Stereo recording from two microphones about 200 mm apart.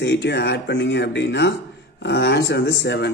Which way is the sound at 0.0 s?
60° left (ahead or behind).